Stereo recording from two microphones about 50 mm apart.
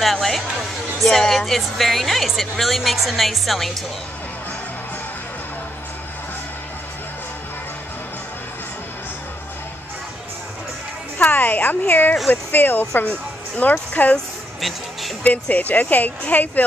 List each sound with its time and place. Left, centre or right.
0.0 s speech: centre
11.1 s music: left
11.9 s speech: left
13.6 s speech: left
15.5 s speech: left